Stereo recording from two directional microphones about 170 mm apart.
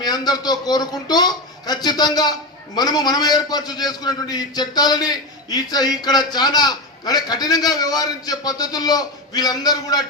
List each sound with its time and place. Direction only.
0.0 s a man's voice: 25° left (ahead or behind)